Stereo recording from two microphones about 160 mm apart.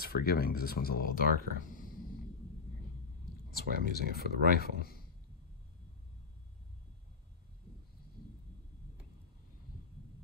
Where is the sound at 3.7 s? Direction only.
60° right (ahead or behind).